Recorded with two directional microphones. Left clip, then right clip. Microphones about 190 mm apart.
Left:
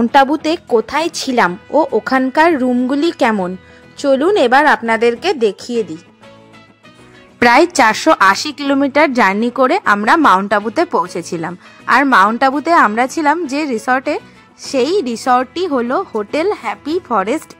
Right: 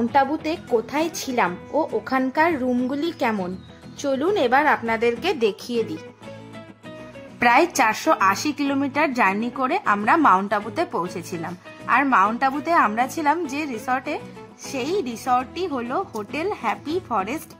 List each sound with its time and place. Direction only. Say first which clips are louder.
0.0 s a woman's voice: left 9 dB; 35° left (ahead or behind)
7.3 s a woman's voice: left 7 dB; 30° left (ahead or behind)